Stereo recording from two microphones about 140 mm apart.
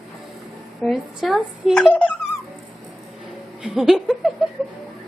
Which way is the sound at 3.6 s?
5° right (ahead or behind).